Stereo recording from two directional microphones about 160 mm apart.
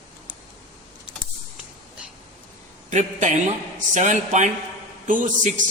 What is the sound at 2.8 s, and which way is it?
A man's voice, 50° right (ahead or behind).